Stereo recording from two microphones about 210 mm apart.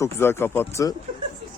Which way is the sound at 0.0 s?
10° left (ahead or behind).